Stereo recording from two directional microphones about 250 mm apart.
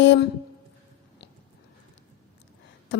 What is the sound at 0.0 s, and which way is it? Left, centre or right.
Speech, left.